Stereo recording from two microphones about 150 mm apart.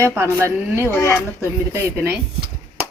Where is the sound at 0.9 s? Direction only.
15° left (ahead or behind).